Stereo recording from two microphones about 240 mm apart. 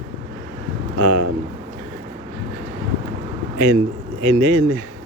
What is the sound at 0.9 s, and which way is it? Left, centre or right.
Speech, right.